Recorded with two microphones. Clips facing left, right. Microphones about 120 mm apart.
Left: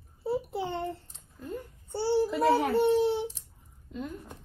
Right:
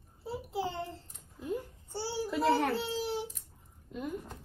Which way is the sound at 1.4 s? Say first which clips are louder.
Right 2 dB; 10° right (ahead or behind).